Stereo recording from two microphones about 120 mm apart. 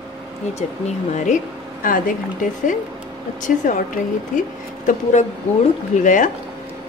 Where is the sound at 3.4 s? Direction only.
90° left.